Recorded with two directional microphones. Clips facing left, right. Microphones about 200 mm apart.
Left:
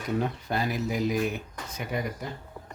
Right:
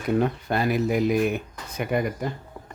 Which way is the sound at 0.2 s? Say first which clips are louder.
Right 5 dB; 60° right (ahead or behind).